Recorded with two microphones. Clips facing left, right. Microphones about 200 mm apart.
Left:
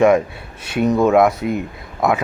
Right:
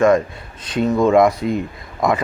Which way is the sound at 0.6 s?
10° left (ahead or behind).